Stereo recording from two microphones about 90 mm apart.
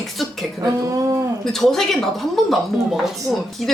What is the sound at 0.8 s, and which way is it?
Speech, 40° right (ahead or behind).